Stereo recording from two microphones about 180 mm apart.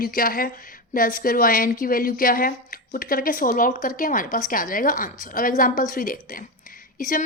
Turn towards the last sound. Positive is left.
turn(degrees=50)  # may be behind; listen again after turning